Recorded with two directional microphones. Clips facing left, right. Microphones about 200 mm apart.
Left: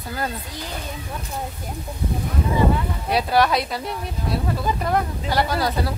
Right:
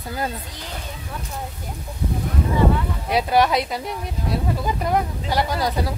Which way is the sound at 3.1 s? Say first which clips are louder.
Right 1 dB; 20° right (ahead or behind).